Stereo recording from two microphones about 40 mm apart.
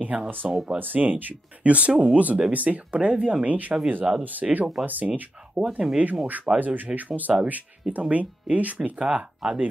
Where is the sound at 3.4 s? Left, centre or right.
Right.